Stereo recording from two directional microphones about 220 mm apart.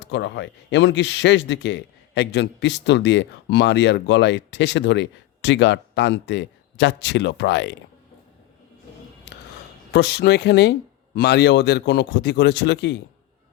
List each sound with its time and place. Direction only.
0.0 s a man's voice: 50° left (ahead or behind)
9.9 s a man's voice: 50° left (ahead or behind)